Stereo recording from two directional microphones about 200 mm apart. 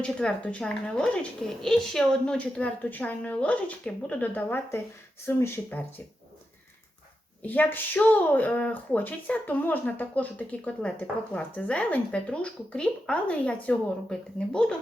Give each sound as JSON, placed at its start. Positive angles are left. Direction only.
{"t": 0.0, "sound": "speech", "side_deg": 5}
{"t": 7.4, "sound": "speech", "side_deg": 10}